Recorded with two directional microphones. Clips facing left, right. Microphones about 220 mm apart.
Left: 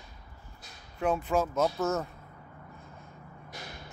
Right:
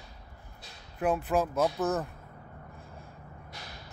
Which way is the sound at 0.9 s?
5° right (ahead or behind).